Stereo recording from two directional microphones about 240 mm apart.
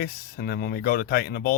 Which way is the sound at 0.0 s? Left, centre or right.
Left.